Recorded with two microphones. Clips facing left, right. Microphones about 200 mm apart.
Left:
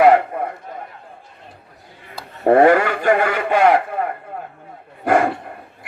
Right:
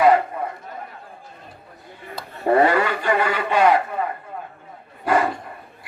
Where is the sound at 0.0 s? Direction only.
55° left (ahead or behind).